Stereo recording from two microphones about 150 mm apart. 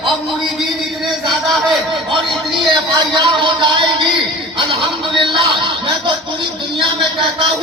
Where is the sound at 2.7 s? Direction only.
30° right (ahead or behind).